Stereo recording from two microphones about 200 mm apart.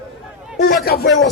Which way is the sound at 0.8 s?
50° left (ahead or behind).